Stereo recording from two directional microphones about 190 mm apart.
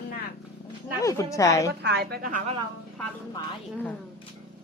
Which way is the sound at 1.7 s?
60° right (ahead or behind).